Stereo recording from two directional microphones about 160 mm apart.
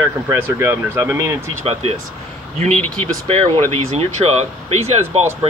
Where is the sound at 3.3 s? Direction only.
40° right (ahead or behind).